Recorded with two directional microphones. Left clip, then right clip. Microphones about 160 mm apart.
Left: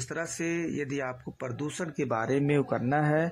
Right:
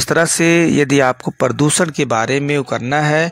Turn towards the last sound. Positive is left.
turn(degrees=-20)  # may be behind; listen again after turning